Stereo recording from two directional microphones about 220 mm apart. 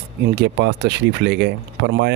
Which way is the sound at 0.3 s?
50° right (ahead or behind).